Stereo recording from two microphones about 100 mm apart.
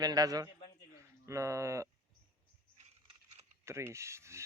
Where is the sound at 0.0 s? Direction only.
40° right (ahead or behind).